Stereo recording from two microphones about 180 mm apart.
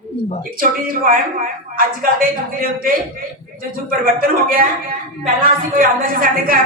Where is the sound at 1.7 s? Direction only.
50° right (ahead or behind).